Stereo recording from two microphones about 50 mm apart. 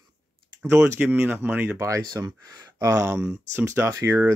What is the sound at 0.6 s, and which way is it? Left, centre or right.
Speech, right.